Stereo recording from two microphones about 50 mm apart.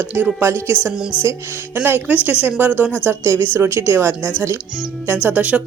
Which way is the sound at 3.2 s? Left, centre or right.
Right.